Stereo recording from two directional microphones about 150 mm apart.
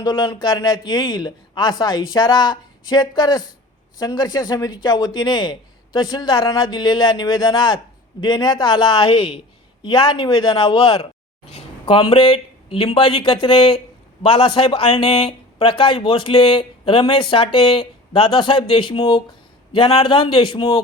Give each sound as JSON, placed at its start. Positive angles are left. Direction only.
{"t": 0.0, "sound": "a man's voice", "side_deg": 25}